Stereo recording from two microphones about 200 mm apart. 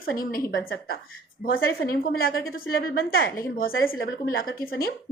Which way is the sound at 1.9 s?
50° left (ahead or behind).